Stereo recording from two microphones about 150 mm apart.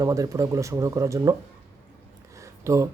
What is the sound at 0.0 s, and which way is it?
Speech, 20° right (ahead or behind).